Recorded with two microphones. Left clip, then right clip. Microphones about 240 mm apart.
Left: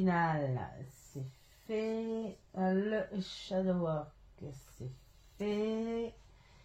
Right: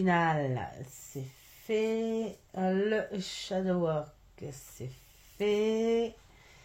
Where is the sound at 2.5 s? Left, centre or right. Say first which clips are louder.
Right 4 dB; right.